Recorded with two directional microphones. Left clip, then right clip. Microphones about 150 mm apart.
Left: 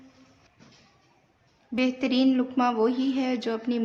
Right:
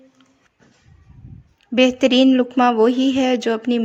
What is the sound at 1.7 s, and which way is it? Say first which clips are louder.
Speech: right 12 dB; 55° right (ahead or behind).